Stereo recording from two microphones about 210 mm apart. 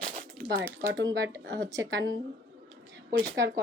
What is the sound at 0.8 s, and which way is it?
Speech, 60° right (ahead or behind).